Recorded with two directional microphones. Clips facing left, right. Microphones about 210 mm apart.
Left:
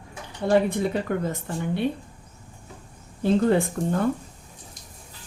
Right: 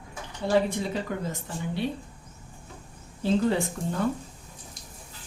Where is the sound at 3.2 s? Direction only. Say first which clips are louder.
Left 4 dB; 55° left (ahead or behind).